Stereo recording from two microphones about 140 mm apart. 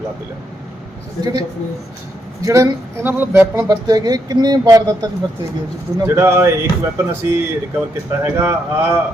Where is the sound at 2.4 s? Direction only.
25° right (ahead or behind).